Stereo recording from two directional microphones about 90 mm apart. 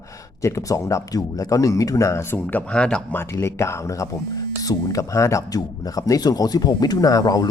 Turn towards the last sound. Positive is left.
turn(degrees=40)  # may be behind; listen again after turning